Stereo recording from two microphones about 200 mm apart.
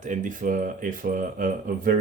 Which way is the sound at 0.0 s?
40° right (ahead or behind).